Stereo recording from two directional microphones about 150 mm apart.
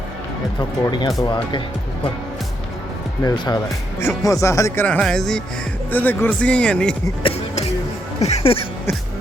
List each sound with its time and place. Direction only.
0.6 s speech: 30° left (ahead or behind)
3.2 s speech: 25° left (ahead or behind); by 6.9 s 5° left (ahead or behind)
7.2 s music: 40° left (ahead or behind)
8.2 s speech: 45° left (ahead or behind)